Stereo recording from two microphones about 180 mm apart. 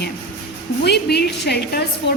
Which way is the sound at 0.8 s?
65° left (ahead or behind).